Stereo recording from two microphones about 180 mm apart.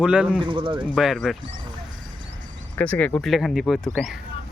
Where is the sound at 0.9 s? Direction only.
Centre (ahead or behind).